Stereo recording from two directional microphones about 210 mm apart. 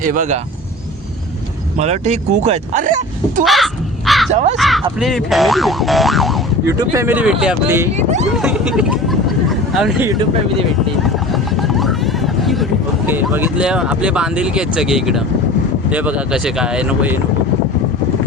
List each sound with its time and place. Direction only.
0.0 s speech: 40° right (ahead or behind)
1.8 s speech: 30° right (ahead or behind)
3.4 s crow: centre (ahead or behind)
4.5 s speech: centre (ahead or behind)
6.7 s speech: 15° right (ahead or behind)
7.9 s speech: 35° right (ahead or behind)
8.4 s speech: 5° right (ahead or behind)
11.0 s a sound: centre (ahead or behind)
13.1 s speech: 10° right (ahead or behind)